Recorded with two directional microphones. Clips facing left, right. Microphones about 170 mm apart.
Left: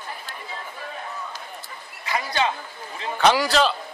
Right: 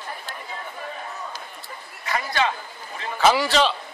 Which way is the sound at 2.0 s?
15° left (ahead or behind).